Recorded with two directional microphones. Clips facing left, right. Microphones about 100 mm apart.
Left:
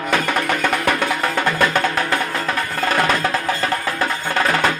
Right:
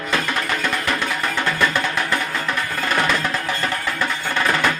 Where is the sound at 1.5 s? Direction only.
45° left (ahead or behind).